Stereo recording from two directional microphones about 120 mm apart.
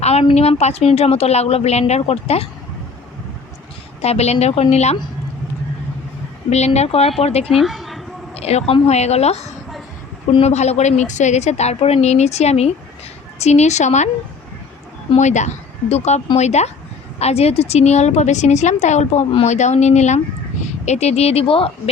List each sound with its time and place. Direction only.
0.0 s a woman's voice: 60° left (ahead or behind)
4.0 s a woman's voice: 60° left (ahead or behind)
6.5 s a woman's voice: 65° left (ahead or behind)
7.5 s dog: centre (ahead or behind)
8.4 s a woman's voice: 60° left (ahead or behind)
15.1 s speech: 80° left; by 21.7 s 50° left (ahead or behind)